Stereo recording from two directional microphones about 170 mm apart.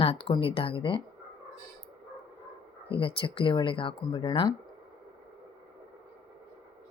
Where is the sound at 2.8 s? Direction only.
30° left (ahead or behind).